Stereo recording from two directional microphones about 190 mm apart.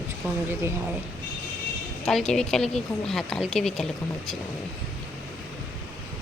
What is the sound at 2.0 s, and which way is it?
Speech, centre (ahead or behind).